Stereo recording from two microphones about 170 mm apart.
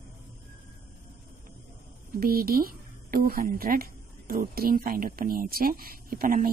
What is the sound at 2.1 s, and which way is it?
Speech, 60° right (ahead or behind).